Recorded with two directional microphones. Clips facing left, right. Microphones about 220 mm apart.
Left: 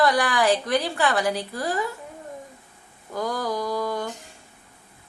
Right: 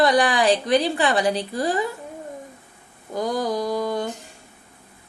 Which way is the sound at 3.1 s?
20° right (ahead or behind).